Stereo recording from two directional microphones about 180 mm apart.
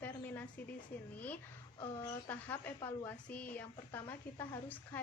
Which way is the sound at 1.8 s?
15° left (ahead or behind).